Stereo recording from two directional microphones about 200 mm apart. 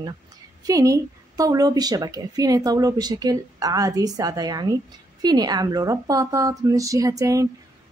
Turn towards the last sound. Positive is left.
turn(degrees=-15)  # may be behind; listen again after turning